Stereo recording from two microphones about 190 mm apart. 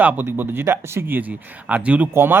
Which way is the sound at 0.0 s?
10° right (ahead or behind).